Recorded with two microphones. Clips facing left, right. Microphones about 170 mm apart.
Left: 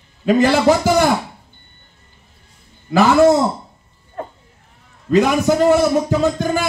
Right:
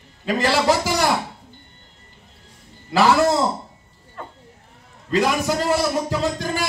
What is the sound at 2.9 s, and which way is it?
Speech, 50° left (ahead or behind).